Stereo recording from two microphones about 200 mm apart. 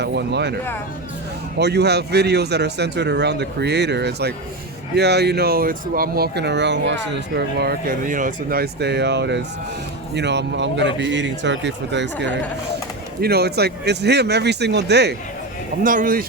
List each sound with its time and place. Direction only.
0.0 s speech: 60° right (ahead or behind)
1.5 s speech: 55° right (ahead or behind)
15.8 s speech: 45° right (ahead or behind)